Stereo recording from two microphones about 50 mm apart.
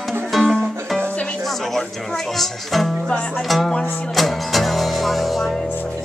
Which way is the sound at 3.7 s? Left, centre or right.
Centre.